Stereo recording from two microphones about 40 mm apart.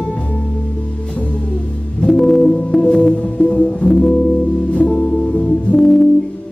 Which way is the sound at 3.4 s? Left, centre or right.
Left.